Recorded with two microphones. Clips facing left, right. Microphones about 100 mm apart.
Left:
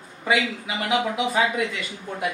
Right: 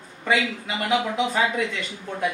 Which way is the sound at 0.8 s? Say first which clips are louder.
Even; 10° left (ahead or behind).